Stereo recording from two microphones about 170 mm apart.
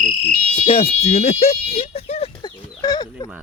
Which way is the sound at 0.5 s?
35° left (ahead or behind).